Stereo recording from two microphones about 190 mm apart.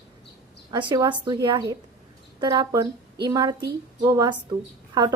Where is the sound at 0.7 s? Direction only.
20° right (ahead or behind).